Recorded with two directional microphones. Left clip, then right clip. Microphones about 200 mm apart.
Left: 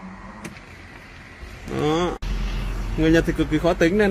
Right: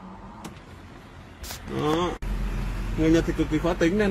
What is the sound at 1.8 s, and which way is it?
Speech, 15° left (ahead or behind).